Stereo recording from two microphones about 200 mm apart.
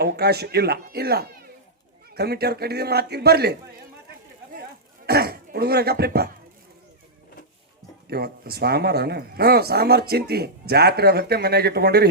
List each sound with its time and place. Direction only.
0.0 s speech: 55° right (ahead or behind)
5.0 s speech: 50° right (ahead or behind)
8.0 s speech: 50° right (ahead or behind)